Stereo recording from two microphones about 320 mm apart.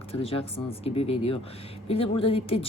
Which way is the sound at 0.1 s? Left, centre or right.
Centre.